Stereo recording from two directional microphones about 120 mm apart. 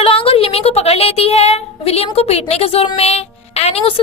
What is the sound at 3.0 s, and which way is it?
Speech, 60° left (ahead or behind).